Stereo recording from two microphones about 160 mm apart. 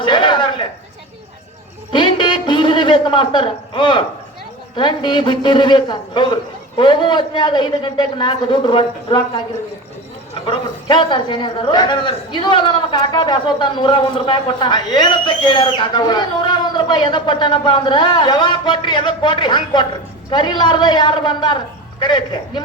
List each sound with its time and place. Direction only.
0.0 s a sound: 30° left (ahead or behind)
1.9 s a man's voice: 30° left (ahead or behind)
10.4 s a man's voice: 30° left (ahead or behind)